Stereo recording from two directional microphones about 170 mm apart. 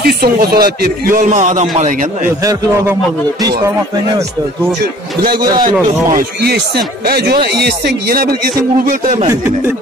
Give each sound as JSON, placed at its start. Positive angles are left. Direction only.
{"t": 0.0, "sound": "speech", "side_deg": -65}
{"t": 6.1, "sound": "speech", "side_deg": -70}
{"t": 9.0, "sound": "speech", "side_deg": -50}